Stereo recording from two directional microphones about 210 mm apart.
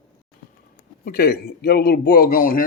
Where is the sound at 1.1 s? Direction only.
45° left (ahead or behind).